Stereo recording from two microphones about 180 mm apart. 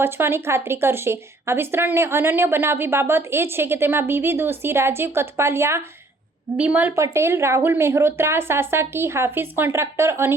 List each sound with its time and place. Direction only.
0.0 s speech: 15° right (ahead or behind)